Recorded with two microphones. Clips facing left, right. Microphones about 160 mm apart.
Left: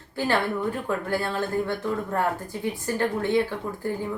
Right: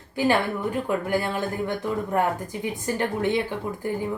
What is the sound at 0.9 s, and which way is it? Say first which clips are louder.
Speech: right 2 dB; 15° right (ahead or behind).